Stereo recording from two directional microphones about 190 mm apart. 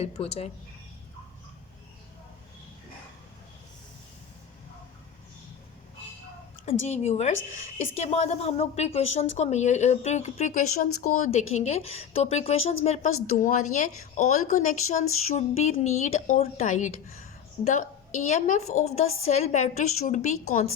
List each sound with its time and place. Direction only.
0.0 s a woman's voice: 35° left (ahead or behind)
6.8 s a woman's voice: 35° left (ahead or behind)